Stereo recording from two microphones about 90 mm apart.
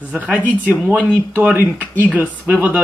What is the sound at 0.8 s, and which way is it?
Speech, 15° left (ahead or behind).